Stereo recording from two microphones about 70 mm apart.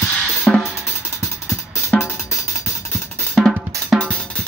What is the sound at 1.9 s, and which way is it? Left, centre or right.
Music, left.